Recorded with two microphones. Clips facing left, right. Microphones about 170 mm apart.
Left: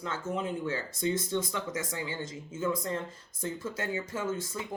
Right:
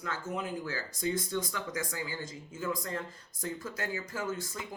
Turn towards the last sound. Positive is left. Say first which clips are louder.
# left 3 dB
turn(degrees=25)  # may be behind; listen again after turning